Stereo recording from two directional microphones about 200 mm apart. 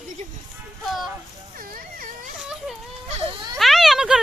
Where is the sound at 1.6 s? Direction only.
45° right (ahead or behind).